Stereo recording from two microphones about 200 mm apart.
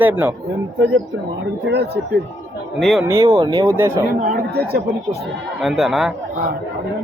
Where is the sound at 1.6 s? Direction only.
55° right (ahead or behind).